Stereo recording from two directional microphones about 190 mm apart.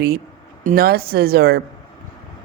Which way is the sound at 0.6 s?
45° right (ahead or behind).